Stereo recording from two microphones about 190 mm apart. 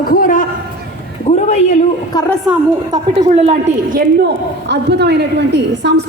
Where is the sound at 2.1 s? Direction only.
20° left (ahead or behind).